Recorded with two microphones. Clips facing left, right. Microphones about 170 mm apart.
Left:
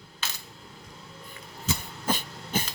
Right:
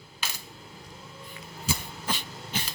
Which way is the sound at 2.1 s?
50° left (ahead or behind).